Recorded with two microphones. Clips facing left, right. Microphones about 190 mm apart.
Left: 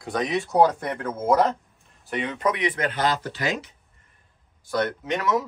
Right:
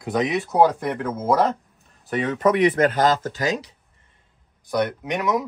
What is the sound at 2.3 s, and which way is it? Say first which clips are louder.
Speech: right 8 dB; 45° right (ahead or behind).